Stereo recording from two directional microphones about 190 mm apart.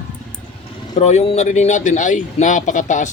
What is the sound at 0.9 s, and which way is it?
Speech, 35° left (ahead or behind).